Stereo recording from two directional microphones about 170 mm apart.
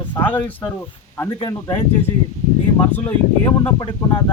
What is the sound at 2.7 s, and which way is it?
Speech, 10° left (ahead or behind).